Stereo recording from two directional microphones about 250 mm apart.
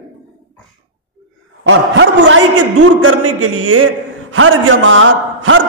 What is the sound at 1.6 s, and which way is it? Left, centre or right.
A man's voice, right.